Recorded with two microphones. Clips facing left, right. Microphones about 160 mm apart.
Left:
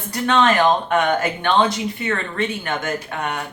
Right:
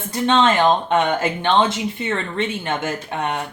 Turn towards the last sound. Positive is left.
turn(degrees=-25)  # may be behind; listen again after turning